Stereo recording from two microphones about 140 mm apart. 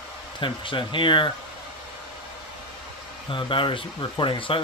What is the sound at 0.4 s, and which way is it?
Speech, 35° left (ahead or behind).